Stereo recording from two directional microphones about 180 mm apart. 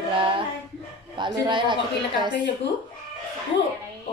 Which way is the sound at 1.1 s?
25° right (ahead or behind).